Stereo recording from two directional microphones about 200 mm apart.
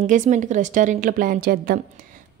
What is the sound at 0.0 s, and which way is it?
A woman's voice, 40° right (ahead or behind).